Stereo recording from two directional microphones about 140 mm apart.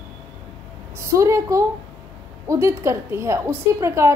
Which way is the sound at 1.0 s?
20° right (ahead or behind).